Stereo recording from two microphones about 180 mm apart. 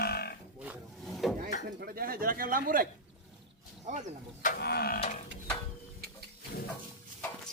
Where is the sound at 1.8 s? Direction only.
55° right (ahead or behind).